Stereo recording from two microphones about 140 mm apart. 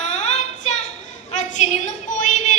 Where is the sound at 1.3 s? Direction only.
60° left (ahead or behind).